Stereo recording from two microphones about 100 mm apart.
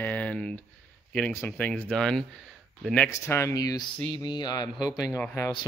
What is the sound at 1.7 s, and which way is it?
Speech, 10° left (ahead or behind).